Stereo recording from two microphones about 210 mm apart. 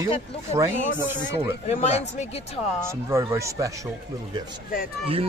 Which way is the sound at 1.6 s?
30° left (ahead or behind).